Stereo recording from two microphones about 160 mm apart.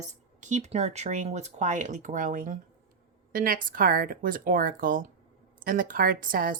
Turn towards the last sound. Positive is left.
turn(degrees=-60)  # may be behind; listen again after turning